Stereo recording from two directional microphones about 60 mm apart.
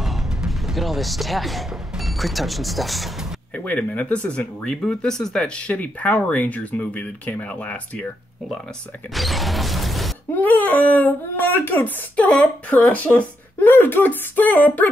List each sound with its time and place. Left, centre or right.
0.0 s speech: centre
3.5 s speech: left; by 5.5 s centre
5.6 s speech: left
9.1 s mechanisms: centre
10.3 s speech: left